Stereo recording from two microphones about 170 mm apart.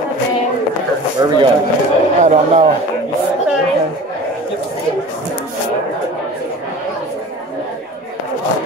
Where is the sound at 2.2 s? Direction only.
40° right (ahead or behind).